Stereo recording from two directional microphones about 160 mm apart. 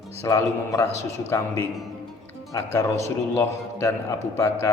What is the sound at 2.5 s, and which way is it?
A man's voice, 20° left (ahead or behind).